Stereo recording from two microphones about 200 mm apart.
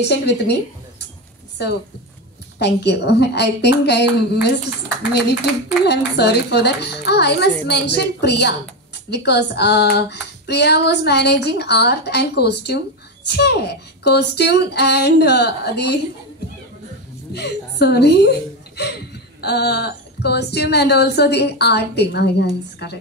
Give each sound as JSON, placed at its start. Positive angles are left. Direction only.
{"t": 0.1, "sound": "speech", "side_deg": 60}
{"t": 2.6, "sound": "speech", "side_deg": 60}
{"t": 5.9, "sound": "speech", "side_deg": 55}
{"t": 17.3, "sound": "speech", "side_deg": 55}